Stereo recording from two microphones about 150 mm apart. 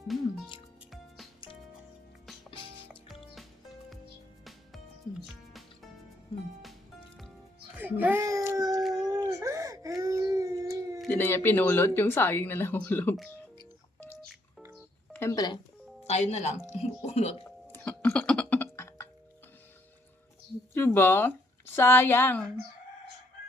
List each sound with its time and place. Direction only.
0.1 s speech: centre (ahead or behind)
0.9 s music: centre (ahead or behind)
2.5 s music: 35° left (ahead or behind)
6.3 s music: 30° left (ahead or behind)
7.8 s child singing: 10° right (ahead or behind)
9.0 s a sound: 20° right (ahead or behind)
9.3 s wail: 20° right (ahead or behind)
11.1 s speech: 15° left (ahead or behind)
15.1 s telephone dialing: 20° left (ahead or behind)
16.0 s speech: 50° left (ahead or behind)
17.7 s music: 15° left (ahead or behind)
20.7 s speech: 15° left (ahead or behind)